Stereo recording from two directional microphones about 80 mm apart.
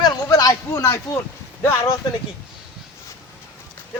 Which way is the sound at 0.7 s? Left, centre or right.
Left.